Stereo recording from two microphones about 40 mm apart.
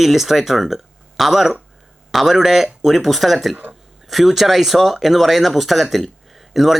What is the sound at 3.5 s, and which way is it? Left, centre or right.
Speech, right.